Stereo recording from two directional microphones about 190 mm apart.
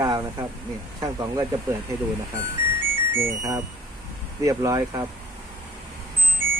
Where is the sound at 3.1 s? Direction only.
15° right (ahead or behind).